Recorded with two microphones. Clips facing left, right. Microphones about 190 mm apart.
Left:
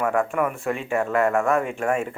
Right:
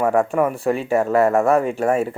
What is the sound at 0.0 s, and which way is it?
Speech, 35° right (ahead or behind).